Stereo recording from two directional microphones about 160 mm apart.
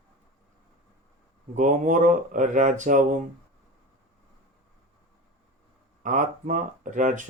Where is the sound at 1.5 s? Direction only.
50° right (ahead or behind).